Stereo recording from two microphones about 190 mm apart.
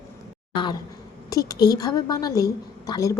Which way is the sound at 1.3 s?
20° left (ahead or behind).